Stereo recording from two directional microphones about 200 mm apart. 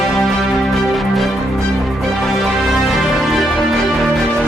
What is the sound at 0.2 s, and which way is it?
Music, centre (ahead or behind).